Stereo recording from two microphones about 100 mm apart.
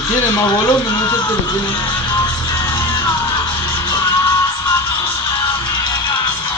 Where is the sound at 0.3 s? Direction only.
40° left (ahead or behind).